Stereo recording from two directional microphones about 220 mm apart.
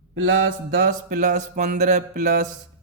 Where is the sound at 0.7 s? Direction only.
40° right (ahead or behind).